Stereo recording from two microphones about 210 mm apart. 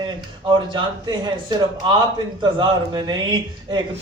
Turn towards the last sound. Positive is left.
turn(degrees=-20)  # may be behind; listen again after turning